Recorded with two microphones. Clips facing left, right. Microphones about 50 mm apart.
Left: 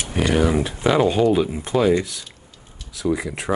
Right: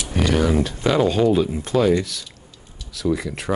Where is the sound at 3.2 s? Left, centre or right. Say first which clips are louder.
Even; centre.